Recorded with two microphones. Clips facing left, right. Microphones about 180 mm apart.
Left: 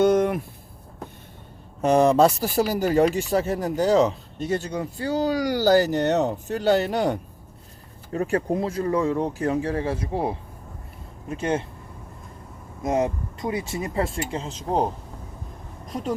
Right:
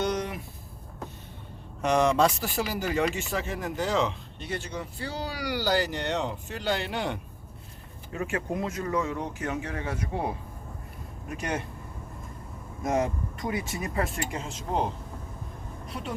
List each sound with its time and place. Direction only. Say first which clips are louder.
0.0 s a sound: left 10 dB; 50° left (ahead or behind)
1.8 s a man's voice: left 6 dB; 35° left (ahead or behind)
12.8 s speech: left 4 dB; 25° left (ahead or behind)
15.9 s a man's voice: left 8 dB; 40° left (ahead or behind)